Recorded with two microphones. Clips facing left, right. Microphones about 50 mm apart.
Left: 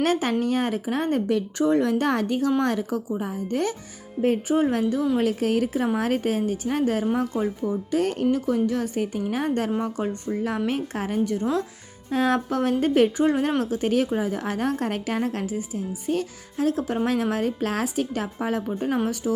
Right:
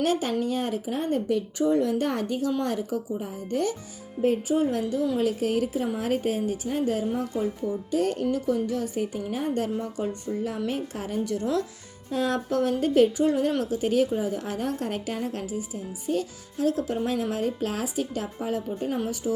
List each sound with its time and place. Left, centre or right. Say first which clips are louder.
0.0 s a woman's voice: left 2 dB; left
4.2 s a woman's voice: left 2 dB; left
10.7 s a woman's voice: left 3 dB; left
11.2 s a woman's voice: left 2 dB; left
12.1 s a woman's voice: left 3 dB; left
16.9 s a woman's voice: left 3 dB; left